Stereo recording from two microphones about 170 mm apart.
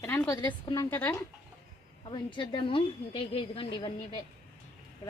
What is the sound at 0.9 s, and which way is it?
Speech, 10° left (ahead or behind).